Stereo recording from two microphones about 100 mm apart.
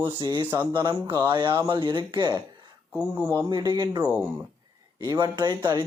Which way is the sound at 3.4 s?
45° right (ahead or behind).